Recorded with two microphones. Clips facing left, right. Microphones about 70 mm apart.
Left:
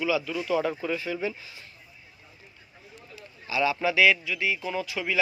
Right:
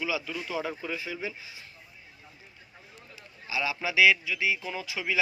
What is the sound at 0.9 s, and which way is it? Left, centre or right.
Speech, centre.